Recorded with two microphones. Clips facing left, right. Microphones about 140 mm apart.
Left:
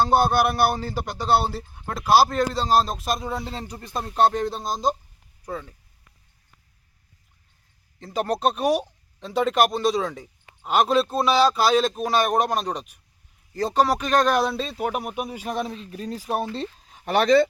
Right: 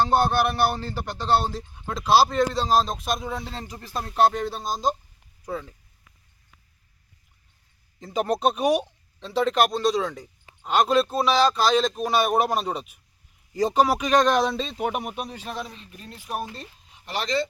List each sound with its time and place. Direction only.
0.0 s speech: 10° left (ahead or behind)
7.9 s speech: centre (ahead or behind); by 15.7 s 15° left (ahead or behind)
15.9 s speech: 40° left (ahead or behind)
16.9 s speech: 55° left (ahead or behind)